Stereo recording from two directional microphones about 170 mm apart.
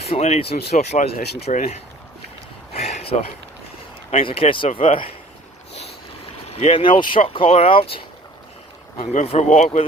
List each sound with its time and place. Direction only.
0.0 s speech: 40° left (ahead or behind)
2.7 s a sound: 40° left (ahead or behind)
4.3 s speech: 30° left (ahead or behind)
6.5 s speech: 40° left (ahead or behind)